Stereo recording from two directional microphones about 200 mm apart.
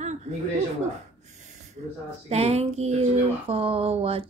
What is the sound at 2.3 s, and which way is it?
Speech, 30° right (ahead or behind).